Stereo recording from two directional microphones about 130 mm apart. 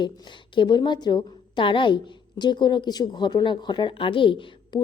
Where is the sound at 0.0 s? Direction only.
40° left (ahead or behind).